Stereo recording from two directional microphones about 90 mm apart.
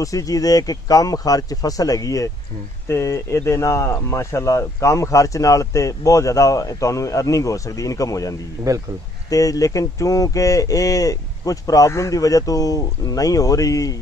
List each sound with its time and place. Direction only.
0.0 s speech: 40° left (ahead or behind)
8.7 s speech: 40° right (ahead or behind)
9.3 s speech: 40° left (ahead or behind)